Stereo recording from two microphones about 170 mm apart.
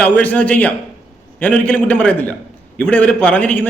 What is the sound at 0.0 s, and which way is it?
A man's voice, 10° left (ahead or behind).